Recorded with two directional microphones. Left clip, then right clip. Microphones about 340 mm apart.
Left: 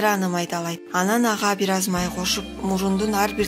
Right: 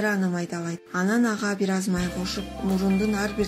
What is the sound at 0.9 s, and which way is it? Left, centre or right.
Speech, left.